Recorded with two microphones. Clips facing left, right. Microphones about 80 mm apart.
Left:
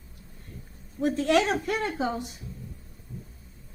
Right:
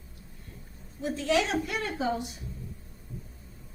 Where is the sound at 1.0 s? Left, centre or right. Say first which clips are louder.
Left 4 dB; left.